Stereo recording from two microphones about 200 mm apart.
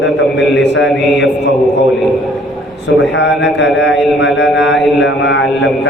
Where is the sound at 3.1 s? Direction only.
65° left (ahead or behind).